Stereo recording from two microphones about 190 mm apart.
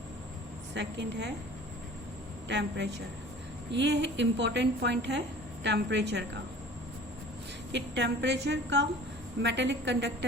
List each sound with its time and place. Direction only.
0.7 s a woman's voice: 70° right (ahead or behind)
2.5 s a woman's voice: 65° right (ahead or behind)
7.7 s a woman's voice: 70° right (ahead or behind)